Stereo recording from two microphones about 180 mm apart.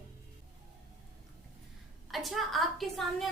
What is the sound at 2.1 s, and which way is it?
A woman's voice, centre (ahead or behind).